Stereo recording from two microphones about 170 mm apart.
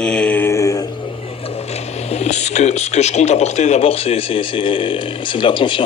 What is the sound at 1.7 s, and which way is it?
Speech, 40° left (ahead or behind).